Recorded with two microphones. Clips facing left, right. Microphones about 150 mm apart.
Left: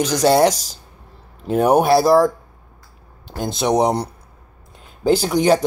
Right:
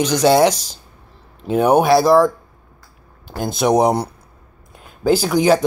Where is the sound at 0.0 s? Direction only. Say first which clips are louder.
Right 1 dB; centre (ahead or behind).